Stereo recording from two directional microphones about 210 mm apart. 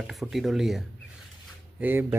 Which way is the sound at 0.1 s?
Centre (ahead or behind).